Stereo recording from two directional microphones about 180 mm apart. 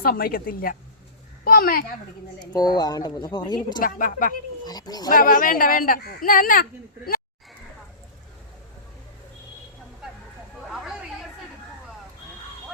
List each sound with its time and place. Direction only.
0.0 s speech: 55° left (ahead or behind)
2.4 s a woman's voice: 20° left (ahead or behind)
3.8 s speech: 50° left (ahead or behind)
4.6 s a woman's voice: 20° left (ahead or behind)
5.0 s speech: 50° left (ahead or behind)